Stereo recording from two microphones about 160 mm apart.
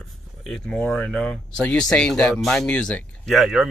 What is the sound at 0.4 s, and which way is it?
Speech, 5° left (ahead or behind).